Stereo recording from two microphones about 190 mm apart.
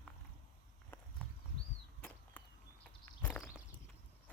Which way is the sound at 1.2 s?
Centre (ahead or behind).